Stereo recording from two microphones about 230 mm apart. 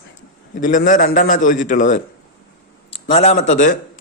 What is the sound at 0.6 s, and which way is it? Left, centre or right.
A man's voice, left.